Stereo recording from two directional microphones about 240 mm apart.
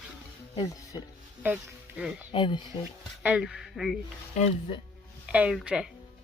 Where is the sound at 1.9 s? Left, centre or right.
Centre.